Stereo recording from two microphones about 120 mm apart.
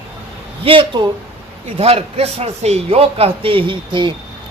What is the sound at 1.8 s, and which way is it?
A man's voice, 55° right (ahead or behind).